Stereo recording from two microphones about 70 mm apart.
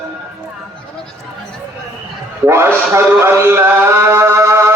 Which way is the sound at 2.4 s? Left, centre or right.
Right.